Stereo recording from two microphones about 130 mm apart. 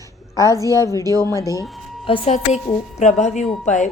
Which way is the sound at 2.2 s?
60° left (ahead or behind).